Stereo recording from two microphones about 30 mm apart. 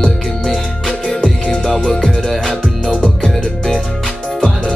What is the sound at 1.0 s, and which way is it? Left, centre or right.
Music, left.